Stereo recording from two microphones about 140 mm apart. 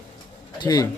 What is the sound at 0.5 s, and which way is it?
Speech, 30° left (ahead or behind).